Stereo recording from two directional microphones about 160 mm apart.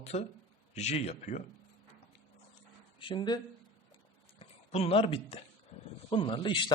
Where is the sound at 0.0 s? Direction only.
45° left (ahead or behind).